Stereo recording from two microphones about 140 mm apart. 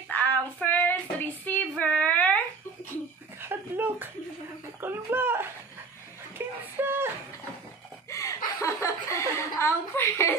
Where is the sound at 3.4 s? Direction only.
15° right (ahead or behind).